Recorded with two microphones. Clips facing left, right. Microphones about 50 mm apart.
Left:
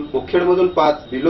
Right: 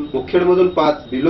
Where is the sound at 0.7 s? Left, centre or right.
Centre.